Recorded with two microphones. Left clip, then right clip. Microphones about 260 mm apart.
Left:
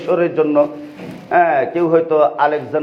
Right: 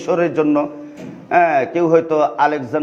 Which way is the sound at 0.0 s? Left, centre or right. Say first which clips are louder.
Left 1 dB; right.